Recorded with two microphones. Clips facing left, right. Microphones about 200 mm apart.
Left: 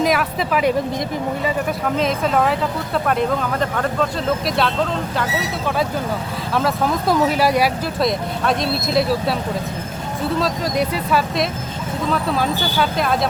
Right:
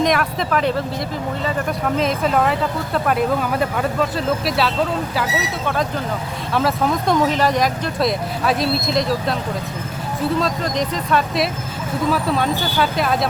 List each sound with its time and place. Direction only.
0.0 s speech: 5° left (ahead or behind)
2.0 s speech: centre (ahead or behind)
6.5 s speech: centre (ahead or behind)
10.4 s speech: 5° left (ahead or behind)